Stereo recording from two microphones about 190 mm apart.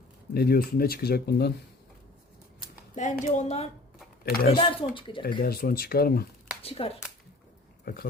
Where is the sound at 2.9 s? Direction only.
40° left (ahead or behind).